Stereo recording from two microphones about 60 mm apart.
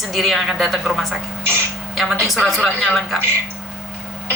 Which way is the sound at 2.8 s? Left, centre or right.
Centre.